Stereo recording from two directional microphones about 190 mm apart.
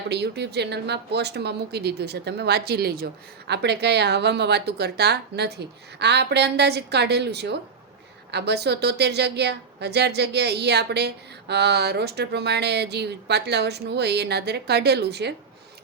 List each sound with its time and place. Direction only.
0.1 s speech: 60° right (ahead or behind)